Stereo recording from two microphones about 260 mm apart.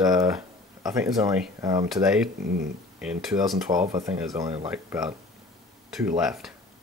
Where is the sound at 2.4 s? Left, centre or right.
Right.